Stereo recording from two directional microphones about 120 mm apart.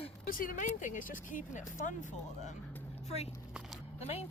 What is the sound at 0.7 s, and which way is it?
Speech, 90° left.